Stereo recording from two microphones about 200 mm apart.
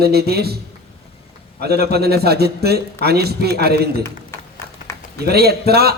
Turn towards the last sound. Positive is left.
turn(degrees=-50)  # may be behind; listen again after turning